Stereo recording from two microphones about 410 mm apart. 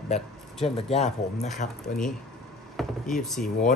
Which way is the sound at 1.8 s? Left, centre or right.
Centre.